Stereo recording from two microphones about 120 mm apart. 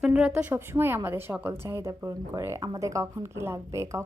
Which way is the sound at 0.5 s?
20° right (ahead or behind).